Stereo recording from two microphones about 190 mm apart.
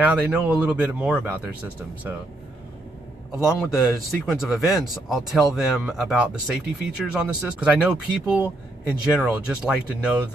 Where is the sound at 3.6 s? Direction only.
Centre (ahead or behind).